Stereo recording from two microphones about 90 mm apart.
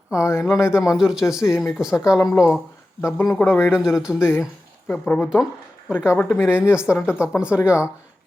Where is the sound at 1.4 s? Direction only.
35° left (ahead or behind).